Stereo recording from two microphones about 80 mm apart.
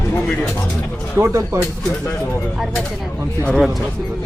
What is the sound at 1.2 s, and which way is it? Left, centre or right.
Speech, right.